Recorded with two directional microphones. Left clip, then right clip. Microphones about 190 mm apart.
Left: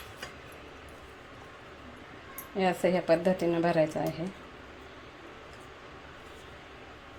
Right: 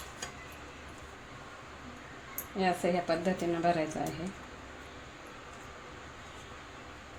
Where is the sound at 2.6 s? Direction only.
35° left (ahead or behind).